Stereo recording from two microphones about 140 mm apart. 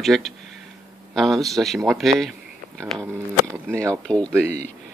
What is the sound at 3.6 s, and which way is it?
Speech, 20° right (ahead or behind).